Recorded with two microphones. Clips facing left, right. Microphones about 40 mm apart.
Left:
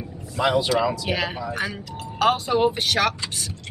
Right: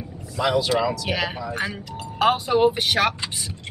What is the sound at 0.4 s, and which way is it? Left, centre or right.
Speech, left.